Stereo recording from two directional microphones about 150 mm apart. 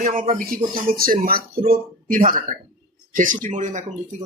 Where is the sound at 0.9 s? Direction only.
70° right (ahead or behind).